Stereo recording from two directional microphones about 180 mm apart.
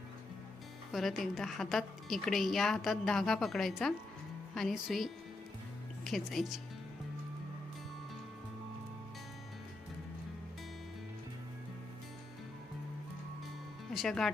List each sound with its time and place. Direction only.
0.9 s a woman's voice: centre (ahead or behind)
13.9 s speech: centre (ahead or behind)